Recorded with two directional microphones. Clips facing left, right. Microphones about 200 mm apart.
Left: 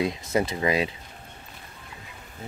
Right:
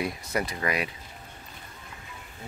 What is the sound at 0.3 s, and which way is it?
Speech, 25° left (ahead or behind).